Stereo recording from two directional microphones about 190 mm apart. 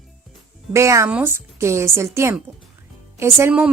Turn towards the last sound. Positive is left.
turn(degrees=-10)  # may be behind; listen again after turning